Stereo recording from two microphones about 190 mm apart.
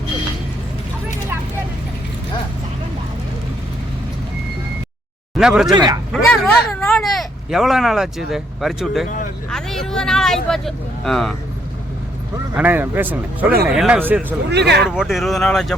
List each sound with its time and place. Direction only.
5.4 s speech: centre (ahead or behind)
5.7 s speech: 20° right (ahead or behind)
6.3 s vehicle: 5° left (ahead or behind)
8.3 s speech: centre (ahead or behind)
12.5 s a man's voice: 10° right (ahead or behind)
14.5 s speech: 60° right (ahead or behind)
14.8 s speech: centre (ahead or behind)